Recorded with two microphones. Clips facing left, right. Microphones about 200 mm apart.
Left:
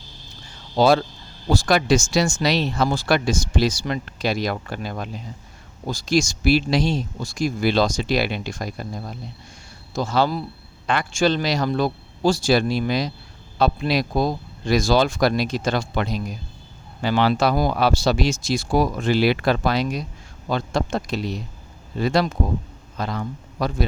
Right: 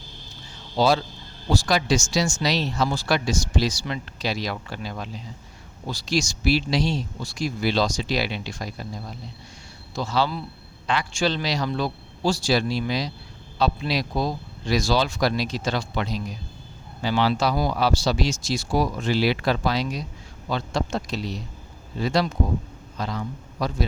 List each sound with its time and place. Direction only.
0.8 s a man's voice: 55° left (ahead or behind)